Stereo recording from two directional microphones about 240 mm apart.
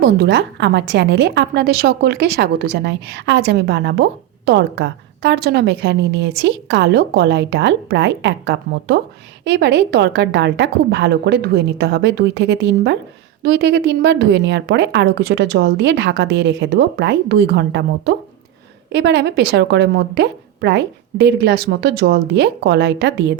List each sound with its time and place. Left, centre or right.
0.0 s a woman's voice: right